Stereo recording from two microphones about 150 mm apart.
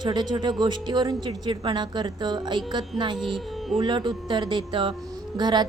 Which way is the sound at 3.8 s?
30° right (ahead or behind).